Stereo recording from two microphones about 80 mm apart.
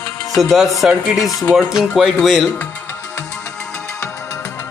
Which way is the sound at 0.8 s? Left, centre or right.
Centre.